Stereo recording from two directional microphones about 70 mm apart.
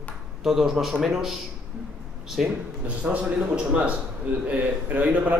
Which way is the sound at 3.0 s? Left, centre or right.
Centre.